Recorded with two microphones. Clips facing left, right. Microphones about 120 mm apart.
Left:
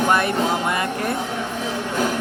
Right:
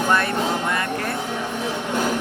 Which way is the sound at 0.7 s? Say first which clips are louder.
Left 2 dB; 15° left (ahead or behind).